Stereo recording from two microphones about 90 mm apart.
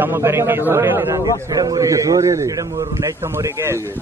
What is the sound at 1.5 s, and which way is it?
A man's voice, 45° right (ahead or behind).